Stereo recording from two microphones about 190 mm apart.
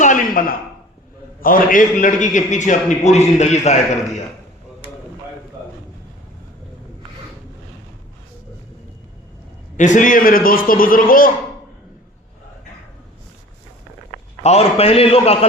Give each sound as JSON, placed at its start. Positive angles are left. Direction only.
{"t": 0.0, "sound": "a sound", "side_deg": 45}
{"t": 1.4, "sound": "a man's voice", "side_deg": 50}
{"t": 9.7, "sound": "a man's voice", "side_deg": 40}
{"t": 14.4, "sound": "a man's voice", "side_deg": 35}